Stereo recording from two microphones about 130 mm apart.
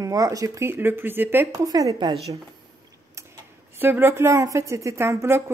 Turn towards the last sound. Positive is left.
turn(degrees=-20)  # may be behind; listen again after turning